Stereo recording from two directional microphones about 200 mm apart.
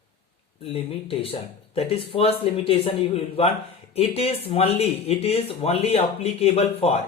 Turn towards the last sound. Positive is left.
turn(degrees=30)  # may be behind; listen again after turning